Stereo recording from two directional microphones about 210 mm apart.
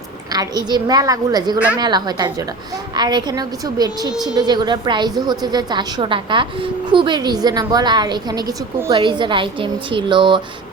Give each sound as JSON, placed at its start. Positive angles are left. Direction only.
{"t": 0.3, "sound": "a woman's voice", "side_deg": -20}